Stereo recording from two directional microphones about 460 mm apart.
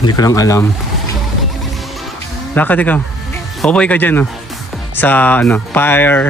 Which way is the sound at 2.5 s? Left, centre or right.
Centre.